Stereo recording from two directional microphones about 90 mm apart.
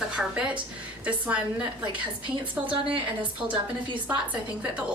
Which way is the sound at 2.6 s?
70° right (ahead or behind).